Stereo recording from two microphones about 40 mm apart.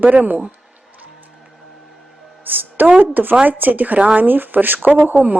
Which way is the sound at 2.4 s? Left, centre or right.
Right.